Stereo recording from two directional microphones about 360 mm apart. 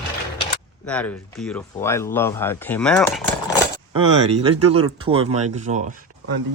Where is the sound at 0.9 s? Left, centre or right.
Centre.